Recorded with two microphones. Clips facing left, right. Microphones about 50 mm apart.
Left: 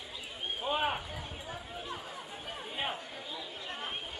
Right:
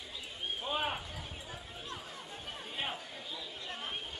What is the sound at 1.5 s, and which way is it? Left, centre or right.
Chatter, centre.